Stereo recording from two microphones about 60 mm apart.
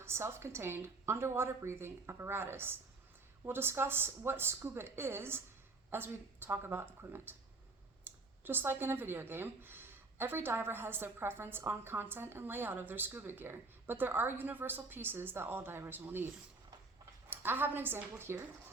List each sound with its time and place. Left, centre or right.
0.0 s a woman's voice: right